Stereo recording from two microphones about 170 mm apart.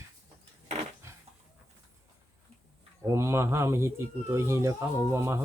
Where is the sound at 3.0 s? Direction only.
15° right (ahead or behind).